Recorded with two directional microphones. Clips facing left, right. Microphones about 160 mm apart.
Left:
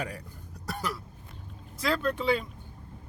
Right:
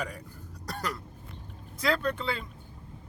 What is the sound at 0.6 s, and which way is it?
Cough, 10° left (ahead or behind).